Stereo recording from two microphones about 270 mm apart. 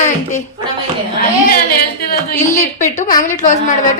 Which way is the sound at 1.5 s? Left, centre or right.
Left.